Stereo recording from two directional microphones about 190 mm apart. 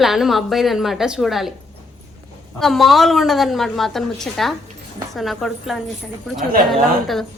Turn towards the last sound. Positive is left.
turn(degrees=0)  # may be behind; listen again after turning